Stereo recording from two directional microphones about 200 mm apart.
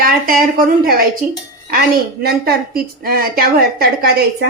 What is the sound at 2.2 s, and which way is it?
A woman's voice, 50° right (ahead or behind).